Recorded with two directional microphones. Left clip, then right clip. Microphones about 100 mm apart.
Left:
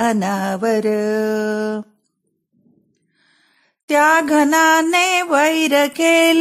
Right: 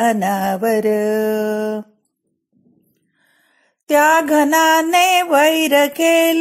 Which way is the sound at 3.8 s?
15° left (ahead or behind).